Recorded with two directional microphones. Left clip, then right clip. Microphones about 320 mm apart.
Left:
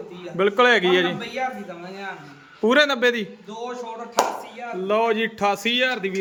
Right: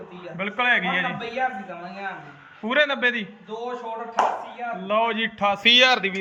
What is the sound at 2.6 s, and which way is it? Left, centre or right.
Speech, centre.